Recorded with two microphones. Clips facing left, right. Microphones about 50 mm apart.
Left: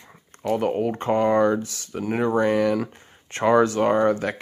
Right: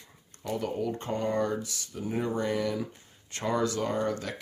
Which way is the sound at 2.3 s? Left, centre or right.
Left.